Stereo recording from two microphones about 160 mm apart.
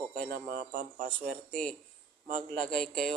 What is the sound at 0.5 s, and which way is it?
Speech, 55° right (ahead or behind).